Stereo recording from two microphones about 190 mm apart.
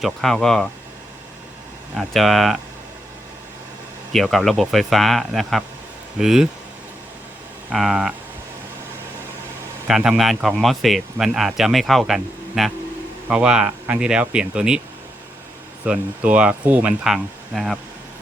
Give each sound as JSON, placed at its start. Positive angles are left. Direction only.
{"t": 0.0, "sound": "speech", "side_deg": 0}
{"t": 2.0, "sound": "speech", "side_deg": 0}
{"t": 4.1, "sound": "speech", "side_deg": 0}
{"t": 7.7, "sound": "speech", "side_deg": 0}
{"t": 9.8, "sound": "speech", "side_deg": -5}
{"t": 15.8, "sound": "speech", "side_deg": -5}